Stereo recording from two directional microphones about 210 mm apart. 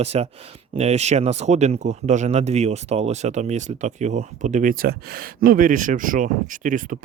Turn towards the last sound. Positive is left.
turn(degrees=-40)  # may be behind; listen again after turning